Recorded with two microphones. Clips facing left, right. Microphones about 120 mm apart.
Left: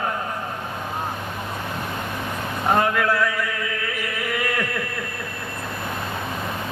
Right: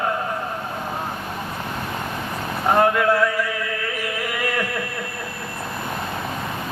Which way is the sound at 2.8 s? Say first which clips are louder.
Right 4 dB; 25° right (ahead or behind).